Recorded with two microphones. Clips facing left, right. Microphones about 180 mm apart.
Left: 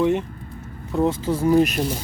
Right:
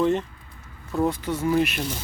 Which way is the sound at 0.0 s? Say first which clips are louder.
Left 2 dB; 10° left (ahead or behind).